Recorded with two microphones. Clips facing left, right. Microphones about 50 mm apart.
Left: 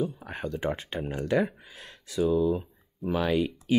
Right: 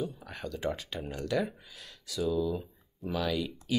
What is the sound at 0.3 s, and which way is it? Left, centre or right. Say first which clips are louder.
Speech: left 4 dB; left.